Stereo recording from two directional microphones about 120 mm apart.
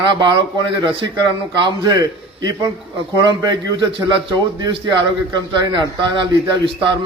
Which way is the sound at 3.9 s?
40° right (ahead or behind).